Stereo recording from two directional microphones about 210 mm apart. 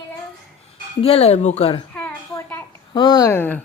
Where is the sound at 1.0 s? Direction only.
30° left (ahead or behind).